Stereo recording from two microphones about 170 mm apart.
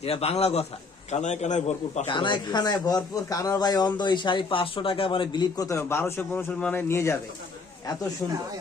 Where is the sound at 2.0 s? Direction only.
30° left (ahead or behind).